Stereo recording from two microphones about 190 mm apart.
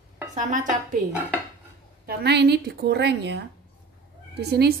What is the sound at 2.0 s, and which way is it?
A woman's voice, 60° right (ahead or behind).